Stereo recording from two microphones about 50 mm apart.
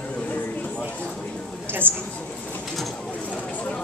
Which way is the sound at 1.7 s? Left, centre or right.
Right.